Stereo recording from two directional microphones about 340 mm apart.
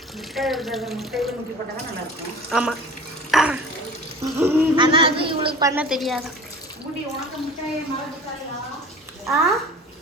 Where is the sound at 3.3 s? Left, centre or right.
Centre.